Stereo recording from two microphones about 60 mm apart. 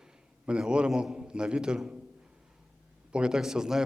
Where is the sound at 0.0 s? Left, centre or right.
Centre.